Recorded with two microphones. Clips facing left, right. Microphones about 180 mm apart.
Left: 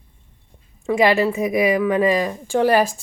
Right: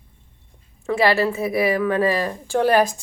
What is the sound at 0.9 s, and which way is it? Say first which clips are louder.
A woman's voice: left 2 dB; 15° left (ahead or behind).